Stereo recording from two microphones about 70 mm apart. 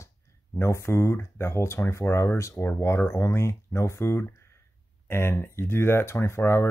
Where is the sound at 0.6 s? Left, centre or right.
Left.